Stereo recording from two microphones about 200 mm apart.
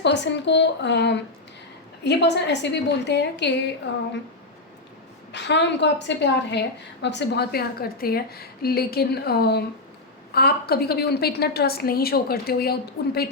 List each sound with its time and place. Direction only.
0.0 s a woman's voice: 60° left (ahead or behind)
5.3 s a woman's voice: 60° left (ahead or behind)